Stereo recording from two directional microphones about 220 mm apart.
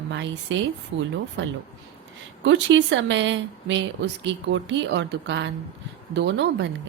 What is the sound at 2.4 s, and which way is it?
Speech, 55° right (ahead or behind).